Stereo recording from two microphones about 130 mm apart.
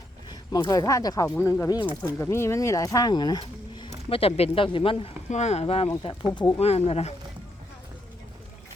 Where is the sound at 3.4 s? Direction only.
35° left (ahead or behind).